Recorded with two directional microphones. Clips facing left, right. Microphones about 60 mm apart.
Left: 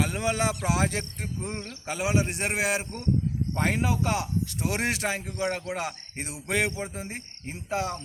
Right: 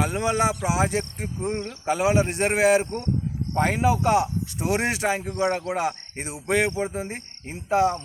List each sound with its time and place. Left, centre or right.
0.0 s speech: right
1.9 s a man's voice: right
4.0 s speech: right